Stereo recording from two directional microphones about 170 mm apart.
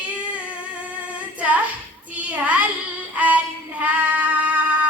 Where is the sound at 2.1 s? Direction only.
10° right (ahead or behind).